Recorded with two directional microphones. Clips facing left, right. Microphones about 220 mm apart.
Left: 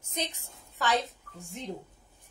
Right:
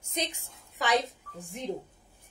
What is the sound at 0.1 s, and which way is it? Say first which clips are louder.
Speech: right 1 dB; 15° right (ahead or behind).